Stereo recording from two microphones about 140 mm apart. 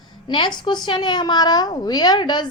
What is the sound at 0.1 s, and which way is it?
A woman's voice, 35° left (ahead or behind).